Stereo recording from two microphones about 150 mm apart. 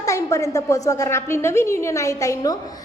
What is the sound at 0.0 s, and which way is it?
A woman's voice, 20° left (ahead or behind).